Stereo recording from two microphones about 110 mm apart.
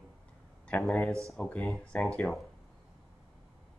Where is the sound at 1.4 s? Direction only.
10° left (ahead or behind).